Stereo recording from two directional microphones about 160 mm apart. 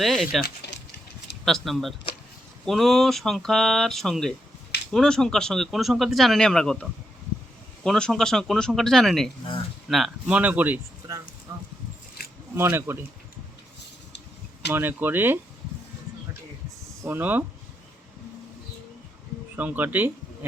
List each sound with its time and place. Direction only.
0.0 s speech: centre (ahead or behind)
0.6 s a sound: 90° left
1.5 s speech: centre (ahead or behind)
7.9 s speech: 5° left (ahead or behind)
12.5 s speech: 15° right (ahead or behind)
14.7 s speech: 15° right (ahead or behind)
17.0 s speech: 10° right (ahead or behind)
19.5 s speech: 10° right (ahead or behind)